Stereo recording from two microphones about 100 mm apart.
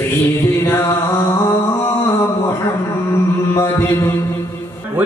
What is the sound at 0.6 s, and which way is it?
Mantra, 20° left (ahead or behind).